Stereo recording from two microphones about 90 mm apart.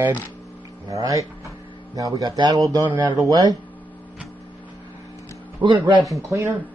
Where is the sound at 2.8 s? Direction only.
20° right (ahead or behind).